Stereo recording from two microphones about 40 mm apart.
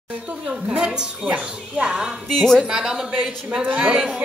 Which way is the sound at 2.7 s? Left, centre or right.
Centre.